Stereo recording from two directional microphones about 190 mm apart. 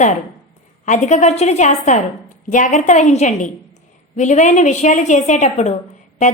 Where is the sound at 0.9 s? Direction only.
40° left (ahead or behind).